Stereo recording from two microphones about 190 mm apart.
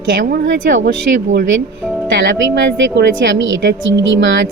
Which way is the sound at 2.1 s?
70° right (ahead or behind).